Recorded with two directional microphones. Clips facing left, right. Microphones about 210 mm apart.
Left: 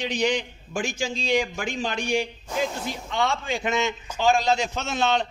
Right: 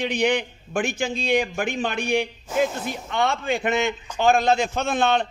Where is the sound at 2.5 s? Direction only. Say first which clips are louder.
Right 5 dB; 5° right (ahead or behind).